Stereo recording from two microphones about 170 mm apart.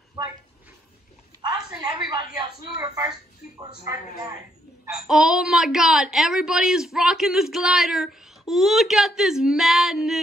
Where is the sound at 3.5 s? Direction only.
20° right (ahead or behind).